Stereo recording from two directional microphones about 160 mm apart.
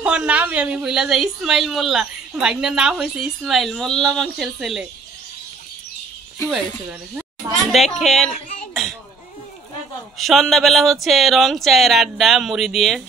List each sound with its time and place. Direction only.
0.0 s a woman's voice: 5° right (ahead or behind)
6.5 s speech: 10° right (ahead or behind)
7.7 s a woman's voice: centre (ahead or behind)
8.3 s a sound: 50° left (ahead or behind)
10.1 s a woman's voice: centre (ahead or behind)